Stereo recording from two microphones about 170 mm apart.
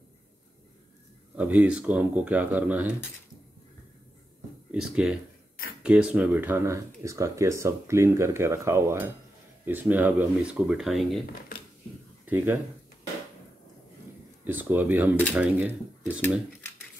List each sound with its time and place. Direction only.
1.3 s speech: 10° right (ahead or behind)
4.6 s speech: 5° right (ahead or behind)
12.3 s speech: 10° right (ahead or behind)
14.4 s speech: 10° right (ahead or behind)